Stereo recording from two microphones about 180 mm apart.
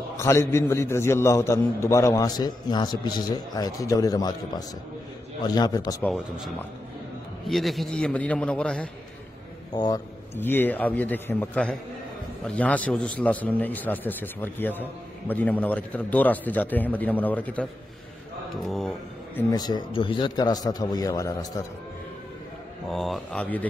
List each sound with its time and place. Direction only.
0.2 s a man's voice: 15° left (ahead or behind)
6.1 s a man's voice: 5° right (ahead or behind)
9.8 s a man's voice: 20° left (ahead or behind)
18.7 s speech: 5° left (ahead or behind)
19.5 s a man's voice: 20° left (ahead or behind)
22.8 s a man's voice: centre (ahead or behind)